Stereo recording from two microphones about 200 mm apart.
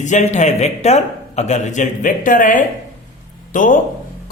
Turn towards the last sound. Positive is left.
turn(degrees=40)  # may be behind; listen again after turning